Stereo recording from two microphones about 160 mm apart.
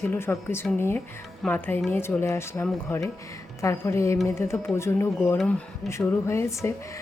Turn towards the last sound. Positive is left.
turn(degrees=15)  # may be behind; listen again after turning